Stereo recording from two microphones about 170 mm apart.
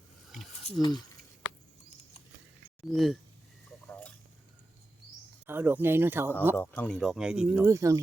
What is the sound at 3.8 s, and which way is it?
Boiling, 10° left (ahead or behind).